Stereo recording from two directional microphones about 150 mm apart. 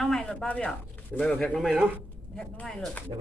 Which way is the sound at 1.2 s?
5° left (ahead or behind).